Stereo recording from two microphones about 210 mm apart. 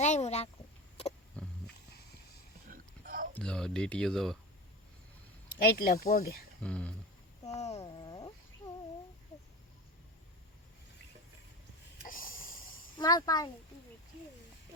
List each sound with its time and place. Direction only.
0.0 s a sound: 35° left (ahead or behind)
1.4 s wild animals: 5° left (ahead or behind)
2.6 s a sound: 40° right (ahead or behind)
3.3 s speech: 5° left (ahead or behind)
5.6 s speech: 45° left (ahead or behind)
6.6 s speech: 5° left (ahead or behind)
7.5 s a sound: 30° left (ahead or behind)
12.0 s snort: 40° left (ahead or behind)
13.0 s a child's voice: 20° left (ahead or behind)